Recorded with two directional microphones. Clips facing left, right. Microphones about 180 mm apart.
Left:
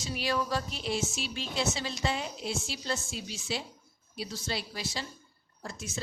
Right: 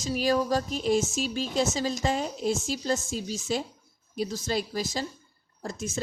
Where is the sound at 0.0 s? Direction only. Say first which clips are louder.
Right 6 dB; 40° right (ahead or behind).